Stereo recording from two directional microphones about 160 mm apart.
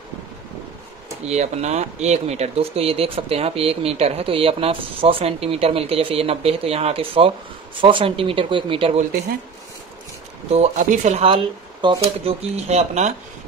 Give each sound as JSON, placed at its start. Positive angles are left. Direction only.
{"t": 1.2, "sound": "speech", "side_deg": -45}
{"t": 10.5, "sound": "speech", "side_deg": -45}
{"t": 12.5, "sound": "speech", "side_deg": -40}